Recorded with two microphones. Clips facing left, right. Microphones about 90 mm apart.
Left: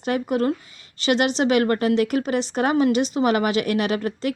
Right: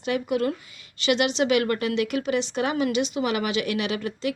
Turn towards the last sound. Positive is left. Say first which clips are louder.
# left 4 dB
turn(degrees=45)  # may be behind; listen again after turning